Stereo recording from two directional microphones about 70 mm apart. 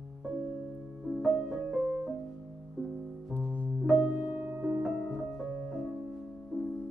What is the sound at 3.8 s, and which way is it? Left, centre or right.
Music, centre.